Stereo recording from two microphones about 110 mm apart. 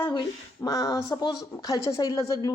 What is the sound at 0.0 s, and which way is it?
A woman's voice, 45° left (ahead or behind).